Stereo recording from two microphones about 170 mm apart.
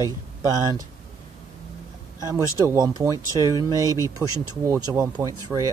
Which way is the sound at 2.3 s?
15° right (ahead or behind).